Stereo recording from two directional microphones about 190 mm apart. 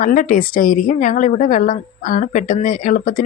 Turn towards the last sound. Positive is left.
turn(degrees=45)  # may be behind; listen again after turning